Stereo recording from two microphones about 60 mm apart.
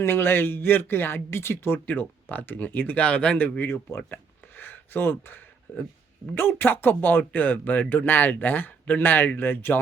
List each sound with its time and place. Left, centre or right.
0.0 s speech: left
1.9 s speech: left
3.9 s a sound: left
6.3 s speech: left